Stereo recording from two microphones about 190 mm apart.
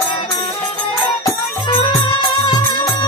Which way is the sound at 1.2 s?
25° left (ahead or behind).